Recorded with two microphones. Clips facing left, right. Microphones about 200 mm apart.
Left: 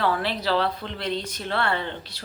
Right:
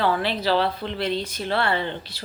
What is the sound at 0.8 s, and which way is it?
Speech, 30° right (ahead or behind).